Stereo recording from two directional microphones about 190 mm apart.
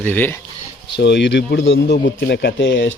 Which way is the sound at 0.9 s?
65° left (ahead or behind).